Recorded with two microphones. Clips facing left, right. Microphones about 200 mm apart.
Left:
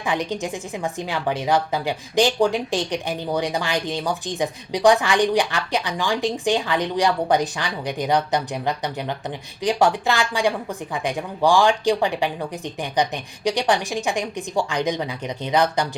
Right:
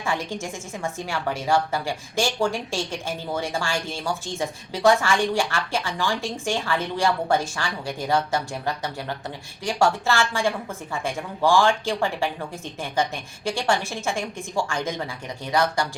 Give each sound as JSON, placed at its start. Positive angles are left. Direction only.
{"t": 0.0, "sound": "a woman's voice", "side_deg": 20}